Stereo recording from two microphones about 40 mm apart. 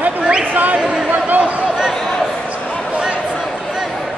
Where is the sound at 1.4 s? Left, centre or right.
Centre.